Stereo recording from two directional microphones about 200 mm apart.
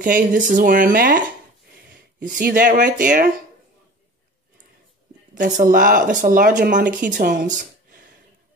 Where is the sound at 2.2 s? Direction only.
45° right (ahead or behind).